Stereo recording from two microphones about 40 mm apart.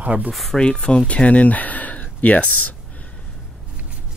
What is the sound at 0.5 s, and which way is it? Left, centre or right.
Speech, left.